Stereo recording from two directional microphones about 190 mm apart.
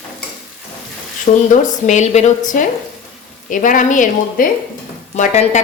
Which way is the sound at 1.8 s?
40° left (ahead or behind).